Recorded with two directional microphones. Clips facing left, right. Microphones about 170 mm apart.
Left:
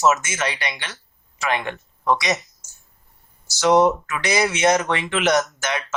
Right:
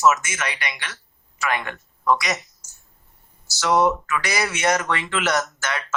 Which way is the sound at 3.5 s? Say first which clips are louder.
Left 3 dB; 20° left (ahead or behind).